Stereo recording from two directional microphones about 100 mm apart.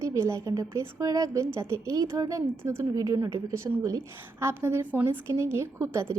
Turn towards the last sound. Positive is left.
turn(degrees=-25)  # may be behind; listen again after turning